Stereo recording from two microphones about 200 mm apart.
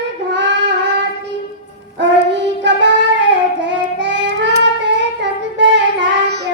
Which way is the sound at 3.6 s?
65° right (ahead or behind).